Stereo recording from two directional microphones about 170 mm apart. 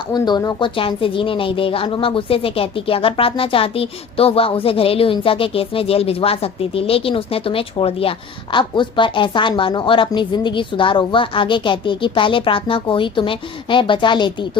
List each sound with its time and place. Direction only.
0.1 s a woman's voice: 25° left (ahead or behind)